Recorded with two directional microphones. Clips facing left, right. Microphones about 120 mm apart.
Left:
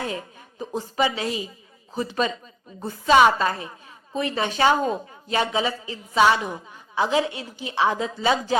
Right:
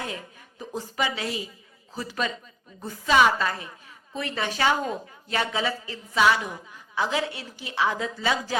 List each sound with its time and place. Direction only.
0.6 s a woman's voice: 25° left (ahead or behind)